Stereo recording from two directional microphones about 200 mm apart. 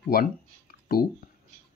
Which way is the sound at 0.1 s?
50° left (ahead or behind).